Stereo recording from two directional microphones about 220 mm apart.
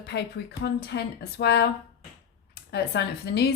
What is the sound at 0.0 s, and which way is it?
A woman's voice, 50° left (ahead or behind).